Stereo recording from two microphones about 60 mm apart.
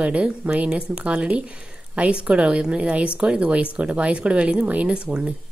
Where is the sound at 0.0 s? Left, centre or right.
Centre.